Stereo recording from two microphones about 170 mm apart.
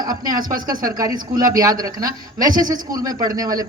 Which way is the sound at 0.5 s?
55° right (ahead or behind).